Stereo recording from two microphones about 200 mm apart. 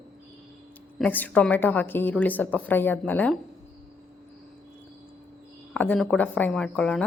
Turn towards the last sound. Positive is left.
turn(degrees=5)  # may be behind; listen again after turning